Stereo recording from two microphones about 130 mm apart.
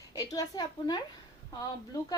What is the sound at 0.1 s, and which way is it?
A woman's voice, 30° left (ahead or behind).